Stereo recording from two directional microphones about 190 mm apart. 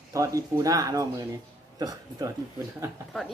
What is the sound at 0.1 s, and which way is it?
Speech, 15° right (ahead or behind).